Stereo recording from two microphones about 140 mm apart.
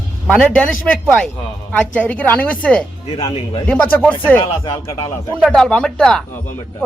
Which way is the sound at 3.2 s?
45° left (ahead or behind).